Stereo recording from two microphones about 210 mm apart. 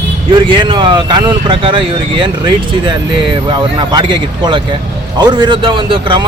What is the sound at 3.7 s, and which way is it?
Speech, 20° right (ahead or behind).